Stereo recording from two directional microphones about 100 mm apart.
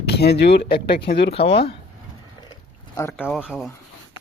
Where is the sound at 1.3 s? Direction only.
70° left (ahead or behind).